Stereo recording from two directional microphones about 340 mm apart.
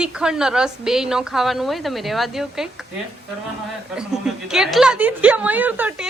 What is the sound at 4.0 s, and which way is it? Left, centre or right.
A woman's voice, centre.